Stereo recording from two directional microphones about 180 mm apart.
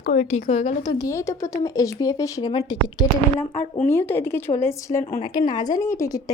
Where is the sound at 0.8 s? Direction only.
20° left (ahead or behind).